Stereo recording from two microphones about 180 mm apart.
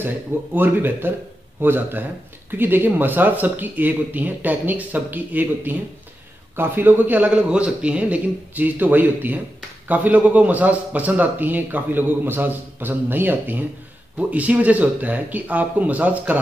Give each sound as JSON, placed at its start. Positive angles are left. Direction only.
{"t": 0.6, "sound": "a man's voice", "side_deg": -10}